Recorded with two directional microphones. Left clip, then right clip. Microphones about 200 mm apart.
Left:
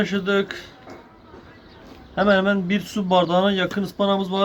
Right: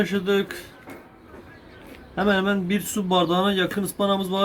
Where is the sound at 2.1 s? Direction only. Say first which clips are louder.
Left 4 dB; 20° left (ahead or behind).